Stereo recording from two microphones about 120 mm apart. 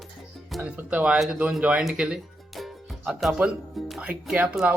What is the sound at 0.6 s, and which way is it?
Speech, 10° right (ahead or behind).